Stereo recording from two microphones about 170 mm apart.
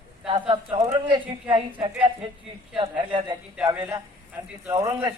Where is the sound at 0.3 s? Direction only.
30° right (ahead or behind).